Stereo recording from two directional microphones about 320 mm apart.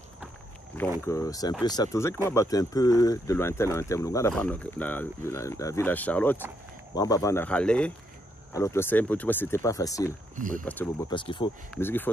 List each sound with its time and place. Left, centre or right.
1.0 s speech: centre
10.3 s speech: right
10.6 s speech: centre